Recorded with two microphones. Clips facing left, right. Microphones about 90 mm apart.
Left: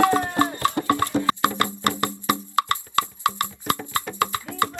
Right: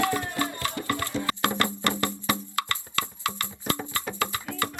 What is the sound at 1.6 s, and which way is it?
Music, 20° left (ahead or behind).